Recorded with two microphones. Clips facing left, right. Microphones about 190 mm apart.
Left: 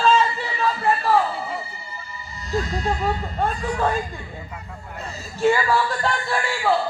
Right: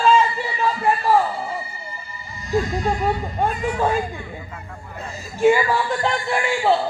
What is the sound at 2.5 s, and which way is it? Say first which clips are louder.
Speech: right 3 dB; 15° right (ahead or behind).